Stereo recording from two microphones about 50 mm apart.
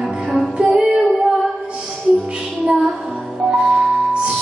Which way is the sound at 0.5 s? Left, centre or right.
Centre.